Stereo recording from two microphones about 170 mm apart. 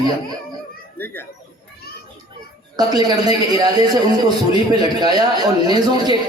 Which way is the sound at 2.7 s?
25° right (ahead or behind).